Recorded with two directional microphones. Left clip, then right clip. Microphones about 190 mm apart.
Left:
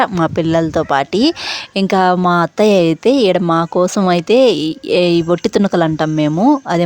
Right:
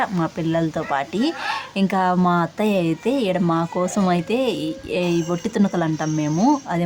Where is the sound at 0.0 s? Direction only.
50° left (ahead or behind).